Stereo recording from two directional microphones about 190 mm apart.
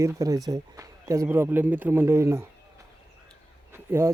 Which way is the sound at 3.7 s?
10° right (ahead or behind).